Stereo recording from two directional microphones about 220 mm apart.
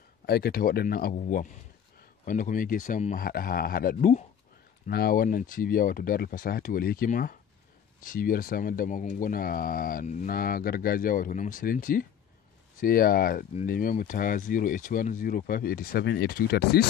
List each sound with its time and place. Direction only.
0.3 s speech: 45° left (ahead or behind)